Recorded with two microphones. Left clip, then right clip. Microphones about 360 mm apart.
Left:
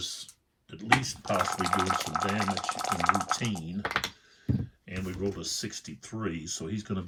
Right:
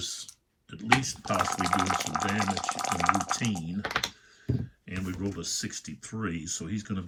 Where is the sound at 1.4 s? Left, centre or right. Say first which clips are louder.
Right 1 dB; centre.